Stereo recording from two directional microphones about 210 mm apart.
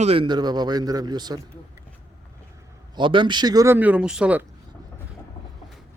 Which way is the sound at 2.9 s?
25° right (ahead or behind).